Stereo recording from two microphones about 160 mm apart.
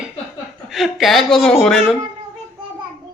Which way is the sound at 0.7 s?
Centre (ahead or behind).